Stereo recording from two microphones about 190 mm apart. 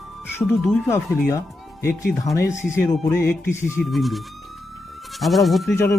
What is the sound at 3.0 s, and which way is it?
Speech, 10° left (ahead or behind).